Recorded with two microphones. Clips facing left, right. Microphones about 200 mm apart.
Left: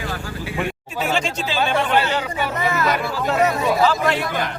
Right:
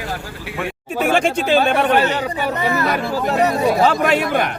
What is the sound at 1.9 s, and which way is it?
Speech, 40° right (ahead or behind).